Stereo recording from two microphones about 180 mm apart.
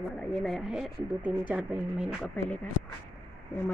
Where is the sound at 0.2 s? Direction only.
5° left (ahead or behind).